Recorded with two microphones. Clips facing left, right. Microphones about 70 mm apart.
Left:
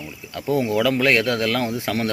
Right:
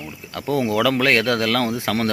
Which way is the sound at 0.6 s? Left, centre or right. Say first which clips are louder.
Right 1 dB; right.